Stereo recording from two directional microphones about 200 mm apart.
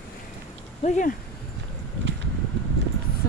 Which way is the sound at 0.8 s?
40° left (ahead or behind).